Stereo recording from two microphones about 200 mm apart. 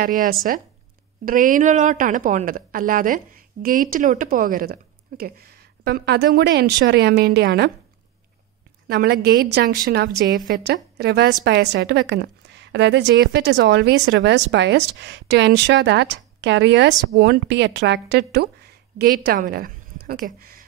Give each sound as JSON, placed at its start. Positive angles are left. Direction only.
{"t": 0.0, "sound": "a woman's voice", "side_deg": -45}
{"t": 8.8, "sound": "a woman's voice", "side_deg": -50}